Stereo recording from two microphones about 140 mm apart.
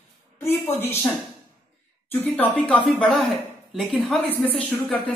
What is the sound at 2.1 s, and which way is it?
Speech, 15° left (ahead or behind).